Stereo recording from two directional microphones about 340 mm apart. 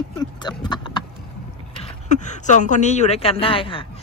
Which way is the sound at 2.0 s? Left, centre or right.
Left.